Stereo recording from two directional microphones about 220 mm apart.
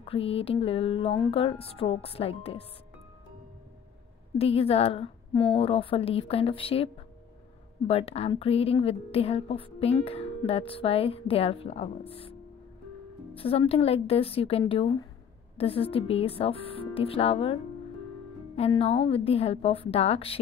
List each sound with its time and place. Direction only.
0.0 s a woman's voice: 25° left (ahead or behind)
4.4 s a woman's voice: 25° left (ahead or behind)
13.4 s a woman's voice: 25° left (ahead or behind)
18.6 s a woman's voice: 25° left (ahead or behind)